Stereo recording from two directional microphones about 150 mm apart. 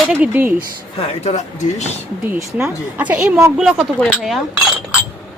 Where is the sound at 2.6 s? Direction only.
10° right (ahead or behind).